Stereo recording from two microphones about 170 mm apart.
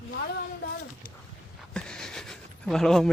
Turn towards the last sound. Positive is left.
turn(degrees=0)  # may be behind; listen again after turning